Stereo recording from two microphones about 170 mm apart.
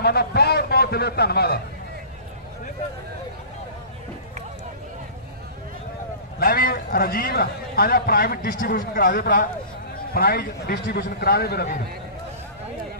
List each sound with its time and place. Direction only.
0.0 s a man's voice: 70° left (ahead or behind)
6.4 s a man's voice: 65° left (ahead or behind)